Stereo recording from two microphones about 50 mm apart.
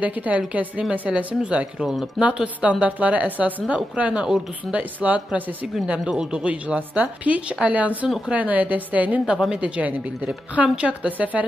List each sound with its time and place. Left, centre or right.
0.0 s a woman's voice: right
4.3 s speech: centre
5.0 s speech: right
6.0 s a woman's voice: centre